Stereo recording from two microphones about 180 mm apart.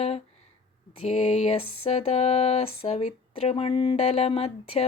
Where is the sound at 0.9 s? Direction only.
40° left (ahead or behind).